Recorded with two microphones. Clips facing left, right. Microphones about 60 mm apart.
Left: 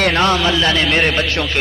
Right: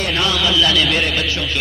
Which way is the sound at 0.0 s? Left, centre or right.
Left.